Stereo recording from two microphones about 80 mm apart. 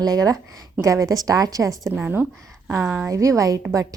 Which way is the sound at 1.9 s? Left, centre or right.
Right.